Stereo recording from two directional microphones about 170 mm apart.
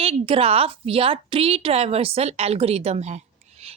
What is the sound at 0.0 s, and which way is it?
Speech, 35° right (ahead or behind).